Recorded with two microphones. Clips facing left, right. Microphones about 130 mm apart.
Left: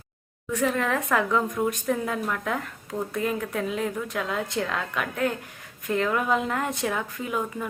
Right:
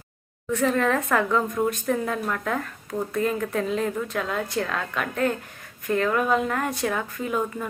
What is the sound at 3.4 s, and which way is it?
A woman's voice, 5° left (ahead or behind).